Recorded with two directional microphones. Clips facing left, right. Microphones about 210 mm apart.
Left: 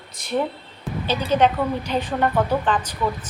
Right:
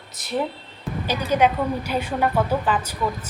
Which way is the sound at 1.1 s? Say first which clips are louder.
Left 1 dB; 10° right (ahead or behind).